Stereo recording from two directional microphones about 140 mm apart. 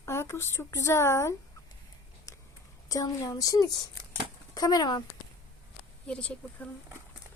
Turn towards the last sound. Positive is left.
turn(degrees=5)  # may be behind; listen again after turning